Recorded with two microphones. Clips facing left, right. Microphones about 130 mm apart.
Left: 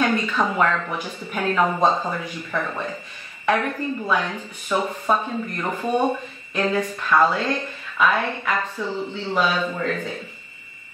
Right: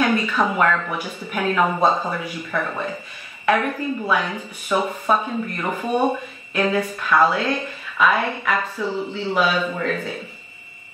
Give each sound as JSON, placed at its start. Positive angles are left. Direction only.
{"t": 0.0, "sound": "speech", "side_deg": -10}